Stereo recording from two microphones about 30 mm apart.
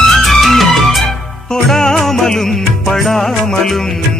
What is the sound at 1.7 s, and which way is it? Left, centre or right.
Music, centre.